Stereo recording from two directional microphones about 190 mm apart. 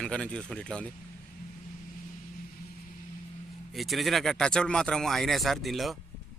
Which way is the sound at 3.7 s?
Centre (ahead or behind).